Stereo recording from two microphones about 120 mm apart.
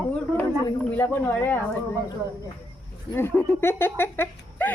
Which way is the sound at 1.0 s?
15° left (ahead or behind).